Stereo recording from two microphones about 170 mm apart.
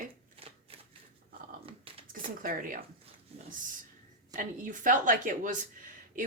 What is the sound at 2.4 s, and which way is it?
Speech, 55° right (ahead or behind).